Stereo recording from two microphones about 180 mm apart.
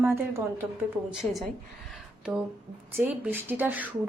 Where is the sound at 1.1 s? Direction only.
Centre (ahead or behind).